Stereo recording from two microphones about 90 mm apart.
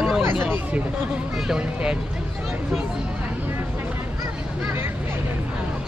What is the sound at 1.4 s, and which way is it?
Speech, 10° right (ahead or behind).